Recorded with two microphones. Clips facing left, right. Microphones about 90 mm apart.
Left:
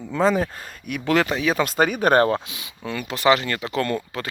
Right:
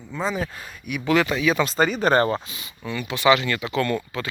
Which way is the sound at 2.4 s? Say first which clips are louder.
Left 1 dB; 90° left.